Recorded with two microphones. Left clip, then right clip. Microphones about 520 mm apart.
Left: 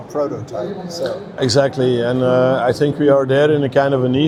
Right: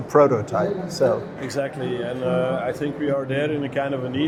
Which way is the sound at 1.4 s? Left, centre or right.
Left.